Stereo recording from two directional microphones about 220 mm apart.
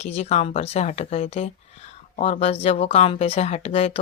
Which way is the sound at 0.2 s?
30° left (ahead or behind).